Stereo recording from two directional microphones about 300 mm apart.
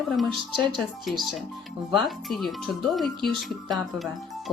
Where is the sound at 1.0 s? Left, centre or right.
Centre.